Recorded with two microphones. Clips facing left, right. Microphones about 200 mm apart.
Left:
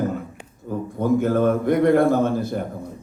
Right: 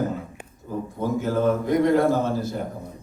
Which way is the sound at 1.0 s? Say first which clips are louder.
Left 5 dB; 55° left (ahead or behind).